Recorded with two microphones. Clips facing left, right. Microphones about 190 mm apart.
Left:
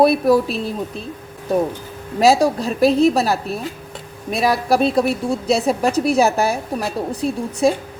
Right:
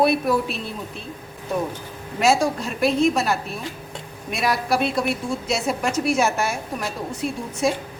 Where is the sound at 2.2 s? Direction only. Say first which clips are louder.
Left 5 dB; 35° left (ahead or behind).